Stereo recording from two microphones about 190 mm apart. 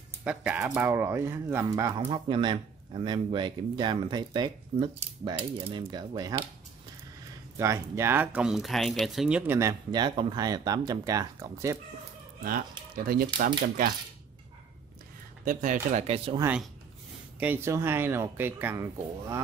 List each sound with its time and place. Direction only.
0.2 s speech: 5° right (ahead or behind)
2.0 s speech: 25° right (ahead or behind)
7.5 s speech: 15° right (ahead or behind)
12.9 s speech: 50° right (ahead or behind)
15.4 s speech: 40° right (ahead or behind)
16.3 s speech: 10° right (ahead or behind)